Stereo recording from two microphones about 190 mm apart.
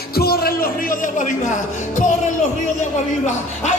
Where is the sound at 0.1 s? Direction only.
55° left (ahead or behind); by 3.7 s 40° left (ahead or behind).